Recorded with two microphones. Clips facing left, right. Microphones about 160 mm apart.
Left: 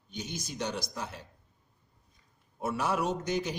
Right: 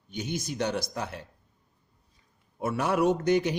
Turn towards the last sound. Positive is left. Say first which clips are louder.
# right 8 dB
turn(degrees=-60)  # may be behind; listen again after turning